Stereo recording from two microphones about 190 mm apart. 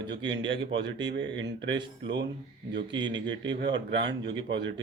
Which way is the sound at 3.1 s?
75° right (ahead or behind).